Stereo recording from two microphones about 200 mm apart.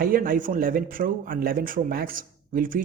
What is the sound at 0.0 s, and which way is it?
Speech, 45° right (ahead or behind).